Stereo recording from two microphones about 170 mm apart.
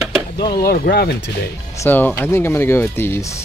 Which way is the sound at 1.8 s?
10° left (ahead or behind).